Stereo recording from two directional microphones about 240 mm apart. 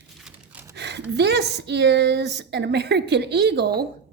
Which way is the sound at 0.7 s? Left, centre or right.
Right.